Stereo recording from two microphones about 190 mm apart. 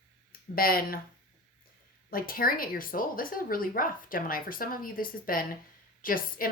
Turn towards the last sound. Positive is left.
turn(degrees=50)  # may be behind; listen again after turning